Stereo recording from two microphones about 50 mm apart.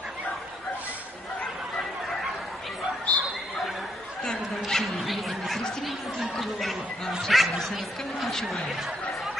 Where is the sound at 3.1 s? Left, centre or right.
Left.